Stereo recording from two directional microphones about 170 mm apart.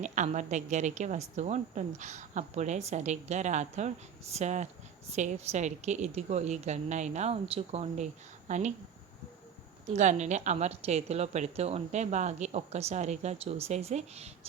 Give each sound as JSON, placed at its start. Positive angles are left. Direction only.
{"t": 0.0, "sound": "a woman's voice", "side_deg": -45}
{"t": 9.8, "sound": "a woman's voice", "side_deg": -45}